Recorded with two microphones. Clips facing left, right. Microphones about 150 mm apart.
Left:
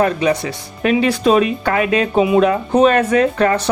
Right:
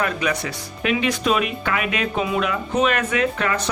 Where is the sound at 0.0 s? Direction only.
30° left (ahead or behind).